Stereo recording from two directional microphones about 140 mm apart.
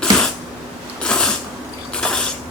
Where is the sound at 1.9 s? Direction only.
5° left (ahead or behind).